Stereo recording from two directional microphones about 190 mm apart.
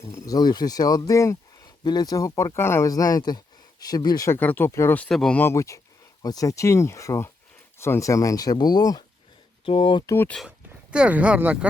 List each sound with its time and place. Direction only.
0.2 s speech: 20° left (ahead or behind)
10.2 s speech: 5° left (ahead or behind)
10.9 s speech: 5° right (ahead or behind)